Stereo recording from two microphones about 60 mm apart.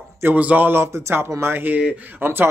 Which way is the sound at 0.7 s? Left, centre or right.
Right.